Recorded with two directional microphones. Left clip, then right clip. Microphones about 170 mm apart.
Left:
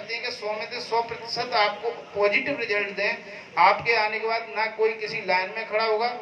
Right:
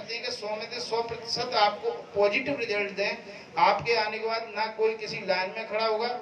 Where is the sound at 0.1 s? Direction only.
20° right (ahead or behind).